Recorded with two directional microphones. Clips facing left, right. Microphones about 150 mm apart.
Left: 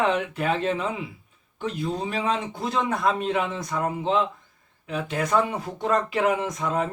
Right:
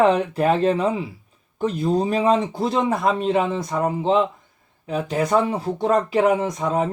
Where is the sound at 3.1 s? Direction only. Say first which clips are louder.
Right 5 dB; 30° right (ahead or behind).